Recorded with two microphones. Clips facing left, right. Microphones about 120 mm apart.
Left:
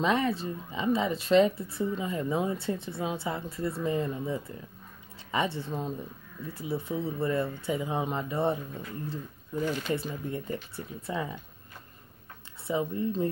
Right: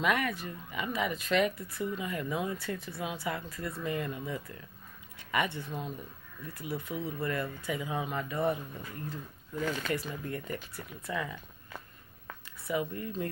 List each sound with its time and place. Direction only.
0.0 s speech: 25° left (ahead or behind)
12.6 s speech: 25° left (ahead or behind)